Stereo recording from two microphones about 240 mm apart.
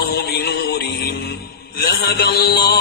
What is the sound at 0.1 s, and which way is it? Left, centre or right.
Music, left.